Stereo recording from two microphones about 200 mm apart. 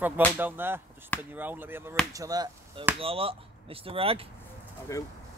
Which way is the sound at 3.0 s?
30° right (ahead or behind).